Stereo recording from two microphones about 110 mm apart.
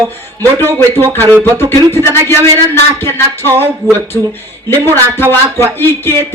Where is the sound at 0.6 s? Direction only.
20° left (ahead or behind).